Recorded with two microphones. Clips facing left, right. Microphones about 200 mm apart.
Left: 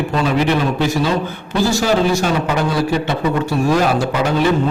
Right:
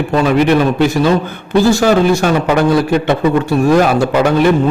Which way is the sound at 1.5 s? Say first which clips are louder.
Right 6 dB; 55° right (ahead or behind).